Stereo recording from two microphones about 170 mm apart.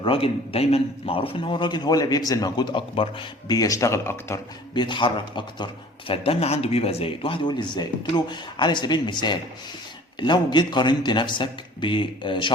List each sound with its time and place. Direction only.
0.0 s a man's voice: 35° left (ahead or behind); by 4.4 s 15° left (ahead or behind)
4.7 s a man's voice: 25° left (ahead or behind)